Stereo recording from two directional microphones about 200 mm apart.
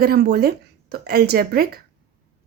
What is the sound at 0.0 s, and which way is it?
A woman's voice, 50° right (ahead or behind).